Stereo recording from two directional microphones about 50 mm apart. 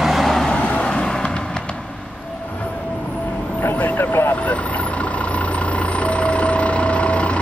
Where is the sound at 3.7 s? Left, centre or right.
Left.